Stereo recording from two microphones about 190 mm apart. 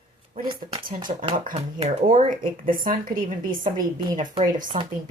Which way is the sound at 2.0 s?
45° right (ahead or behind).